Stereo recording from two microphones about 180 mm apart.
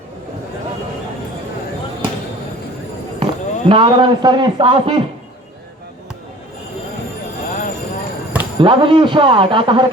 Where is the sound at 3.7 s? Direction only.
30° right (ahead or behind).